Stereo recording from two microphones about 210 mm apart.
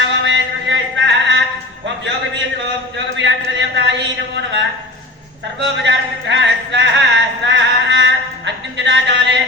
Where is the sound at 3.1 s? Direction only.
60° right (ahead or behind).